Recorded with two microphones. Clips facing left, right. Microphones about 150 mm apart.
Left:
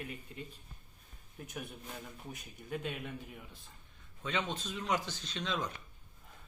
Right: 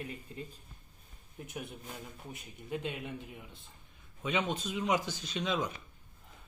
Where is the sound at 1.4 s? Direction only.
25° right (ahead or behind).